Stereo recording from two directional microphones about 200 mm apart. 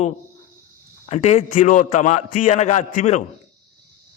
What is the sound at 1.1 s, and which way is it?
A man's voice, 30° left (ahead or behind).